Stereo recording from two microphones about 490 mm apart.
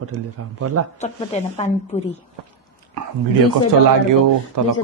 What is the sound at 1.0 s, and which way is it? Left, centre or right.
Speech, centre.